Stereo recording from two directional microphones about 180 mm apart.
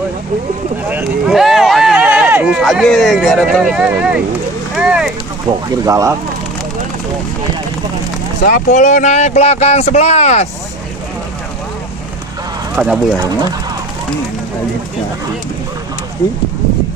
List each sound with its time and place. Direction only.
0.8 s speech: 5° right (ahead or behind)
4.7 s a sound: 5° right (ahead or behind)
5.9 s speech: 20° right (ahead or behind)
8.5 s speech: 45° left (ahead or behind)
12.7 s speech: 5° right (ahead or behind)